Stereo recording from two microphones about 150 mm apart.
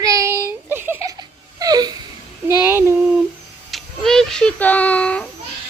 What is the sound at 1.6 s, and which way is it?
Wail, 25° right (ahead or behind).